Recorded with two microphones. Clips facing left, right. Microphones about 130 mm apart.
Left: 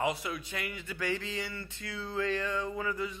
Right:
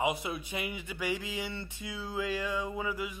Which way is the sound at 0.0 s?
20° right (ahead or behind).